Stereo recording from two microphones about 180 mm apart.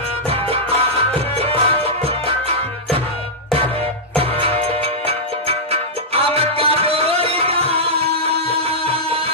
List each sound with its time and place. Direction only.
0.3 s music: 30° right (ahead or behind)
4.2 s music: 30° right (ahead or behind)